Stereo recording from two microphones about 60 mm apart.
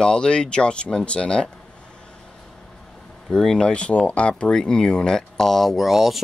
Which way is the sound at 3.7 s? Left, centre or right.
Left.